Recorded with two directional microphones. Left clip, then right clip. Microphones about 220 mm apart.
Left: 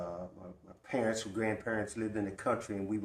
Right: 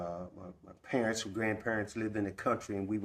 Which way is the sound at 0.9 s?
40° right (ahead or behind).